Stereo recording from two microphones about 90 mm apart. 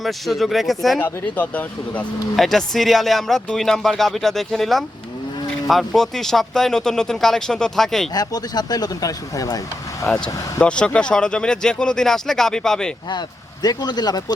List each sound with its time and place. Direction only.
0.0 s speech: centre (ahead or behind)
1.4 s speech: 15° left (ahead or behind)
2.3 s speech: 5° left (ahead or behind)
8.1 s speech: 45° left (ahead or behind)
10.1 s speech: 10° left (ahead or behind)
13.1 s speech: 50° left (ahead or behind)